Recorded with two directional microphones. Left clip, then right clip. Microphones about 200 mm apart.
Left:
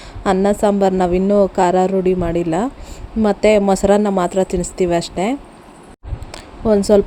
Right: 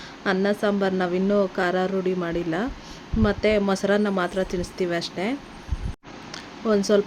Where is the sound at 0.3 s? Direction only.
20° left (ahead or behind).